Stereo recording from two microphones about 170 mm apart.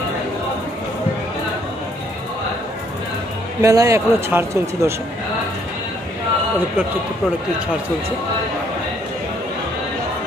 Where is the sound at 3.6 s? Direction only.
20° right (ahead or behind).